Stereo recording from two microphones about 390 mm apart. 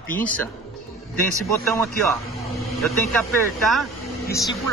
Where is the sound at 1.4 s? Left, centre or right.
Centre.